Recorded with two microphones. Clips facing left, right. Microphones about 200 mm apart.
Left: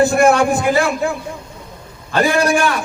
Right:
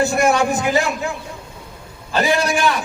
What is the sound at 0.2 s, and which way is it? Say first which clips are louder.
Speech: left 4 dB; 55° left (ahead or behind).